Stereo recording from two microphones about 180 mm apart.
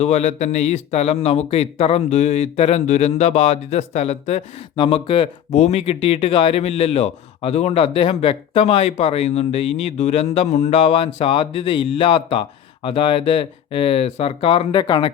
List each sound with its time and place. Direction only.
0.0 s speech: 35° left (ahead or behind)